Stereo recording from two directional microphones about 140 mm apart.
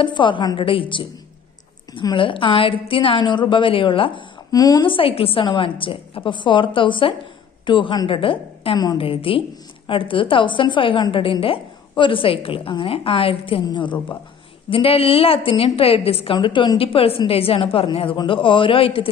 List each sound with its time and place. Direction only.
0.0 s a woman's voice: 35° left (ahead or behind)
4.5 s a woman's voice: 25° left (ahead or behind)